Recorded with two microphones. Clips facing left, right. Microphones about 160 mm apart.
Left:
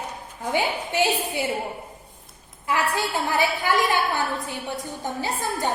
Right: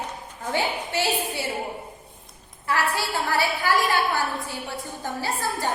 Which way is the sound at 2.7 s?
20° left (ahead or behind).